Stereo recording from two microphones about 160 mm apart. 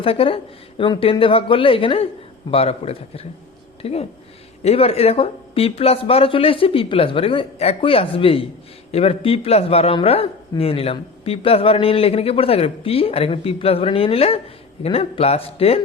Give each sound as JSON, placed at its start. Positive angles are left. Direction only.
{"t": 0.0, "sound": "a man's voice", "side_deg": 35}